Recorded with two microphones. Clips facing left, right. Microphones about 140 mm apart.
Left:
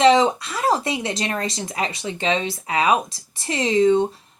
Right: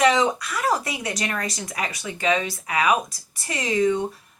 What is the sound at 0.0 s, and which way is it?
A woman's voice, 25° left (ahead or behind).